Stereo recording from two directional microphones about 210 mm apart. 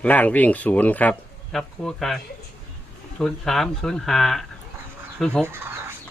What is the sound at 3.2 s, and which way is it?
Speech, centre (ahead or behind).